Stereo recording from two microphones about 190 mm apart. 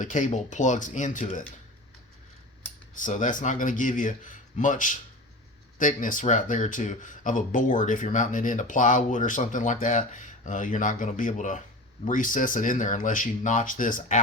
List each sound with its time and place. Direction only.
0.0 s speech: 40° left (ahead or behind)
3.0 s speech: 40° left (ahead or behind)